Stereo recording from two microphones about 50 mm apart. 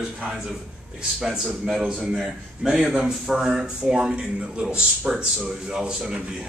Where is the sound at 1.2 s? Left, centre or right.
Centre.